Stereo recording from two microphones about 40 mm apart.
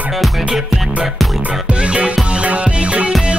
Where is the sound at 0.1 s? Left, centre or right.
Centre.